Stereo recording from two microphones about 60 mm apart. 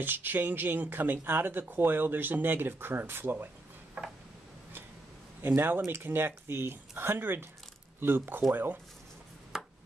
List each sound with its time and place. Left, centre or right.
0.0 s speech: right
5.5 s speech: right
9.5 s a sound: centre